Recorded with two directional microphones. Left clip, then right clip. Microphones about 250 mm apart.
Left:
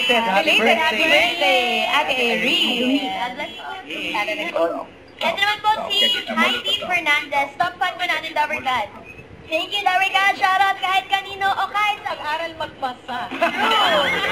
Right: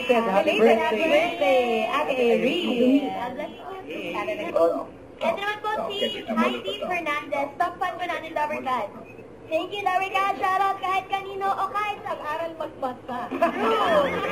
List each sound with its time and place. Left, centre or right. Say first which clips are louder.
0.0 s a woman's voice: left 4 dB; centre